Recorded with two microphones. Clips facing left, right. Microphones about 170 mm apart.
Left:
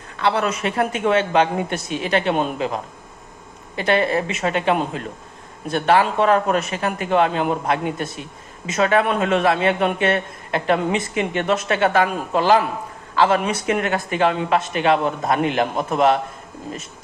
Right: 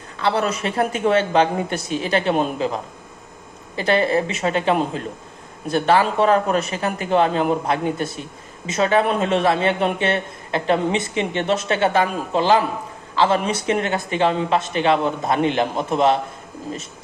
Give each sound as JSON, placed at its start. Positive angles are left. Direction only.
{"t": 0.2, "sound": "a man's voice", "side_deg": -35}
{"t": 3.8, "sound": "a man's voice", "side_deg": -35}